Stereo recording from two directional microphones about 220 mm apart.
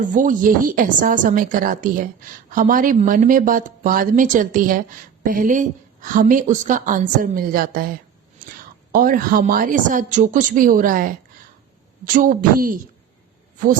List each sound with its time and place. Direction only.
0.0 s speech: 35° right (ahead or behind)
8.4 s whispering: 40° right (ahead or behind)
8.9 s speech: 40° right (ahead or behind)